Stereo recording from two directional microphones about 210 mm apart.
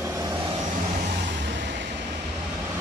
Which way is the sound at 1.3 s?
55° right (ahead or behind).